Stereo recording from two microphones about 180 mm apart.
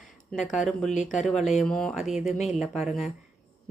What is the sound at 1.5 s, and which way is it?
Speech, 5° left (ahead or behind).